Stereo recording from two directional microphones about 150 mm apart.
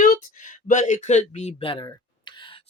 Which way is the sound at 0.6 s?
55° left (ahead or behind).